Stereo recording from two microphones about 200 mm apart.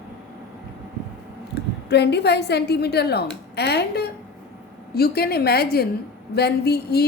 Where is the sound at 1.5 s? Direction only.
55° left (ahead or behind).